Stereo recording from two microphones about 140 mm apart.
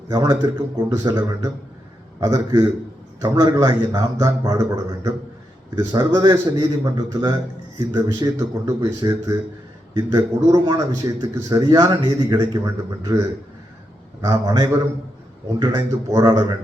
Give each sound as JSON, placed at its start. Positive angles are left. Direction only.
{"t": 0.1, "sound": "a man's voice", "side_deg": -30}
{"t": 6.3, "sound": "a man's voice", "side_deg": -30}
{"t": 14.2, "sound": "a man's voice", "side_deg": -25}